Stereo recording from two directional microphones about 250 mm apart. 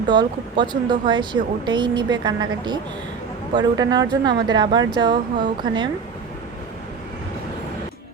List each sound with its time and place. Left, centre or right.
0.1 s speech: centre